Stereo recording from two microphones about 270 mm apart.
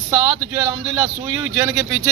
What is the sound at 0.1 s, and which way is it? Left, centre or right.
Speech, centre.